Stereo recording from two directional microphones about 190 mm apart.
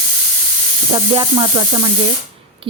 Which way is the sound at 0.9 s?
25° right (ahead or behind).